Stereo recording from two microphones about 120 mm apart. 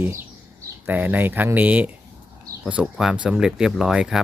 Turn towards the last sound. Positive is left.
turn(degrees=-5)  # may be behind; listen again after turning